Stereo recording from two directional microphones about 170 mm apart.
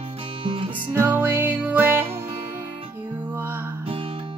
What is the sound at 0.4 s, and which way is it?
Music, 30° right (ahead or behind).